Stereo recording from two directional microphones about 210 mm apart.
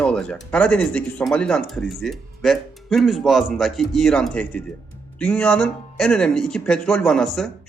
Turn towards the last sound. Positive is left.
turn(degrees=0)  # may be behind; listen again after turning